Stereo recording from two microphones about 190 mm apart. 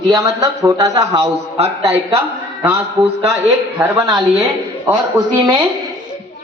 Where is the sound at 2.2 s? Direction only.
5° right (ahead or behind).